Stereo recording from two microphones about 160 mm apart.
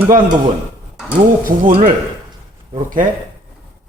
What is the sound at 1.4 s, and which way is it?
Speech, 60° right (ahead or behind).